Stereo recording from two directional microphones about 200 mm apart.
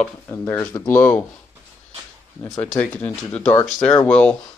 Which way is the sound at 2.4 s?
10° left (ahead or behind).